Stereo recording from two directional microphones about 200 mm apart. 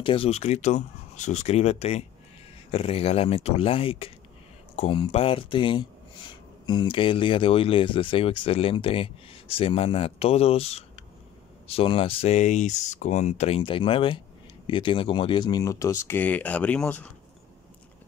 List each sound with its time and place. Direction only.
0.0 s speech: 25° left (ahead or behind); by 17.1 s 5° left (ahead or behind)